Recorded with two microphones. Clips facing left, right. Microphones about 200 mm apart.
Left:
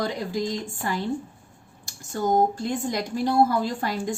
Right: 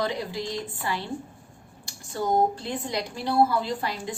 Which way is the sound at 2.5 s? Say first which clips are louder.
Left 3 dB; 50° left (ahead or behind).